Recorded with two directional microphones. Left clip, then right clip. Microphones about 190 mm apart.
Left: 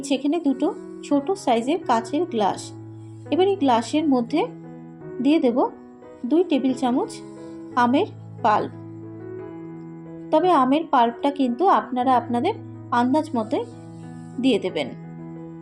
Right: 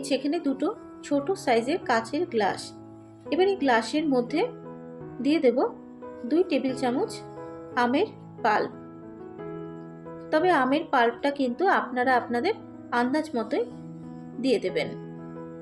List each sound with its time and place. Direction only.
0.3 s speech: 15° right (ahead or behind)
0.6 s a woman's voice: 25° left (ahead or behind)
10.2 s a woman's voice: 25° left (ahead or behind)
14.5 s speech: 10° right (ahead or behind)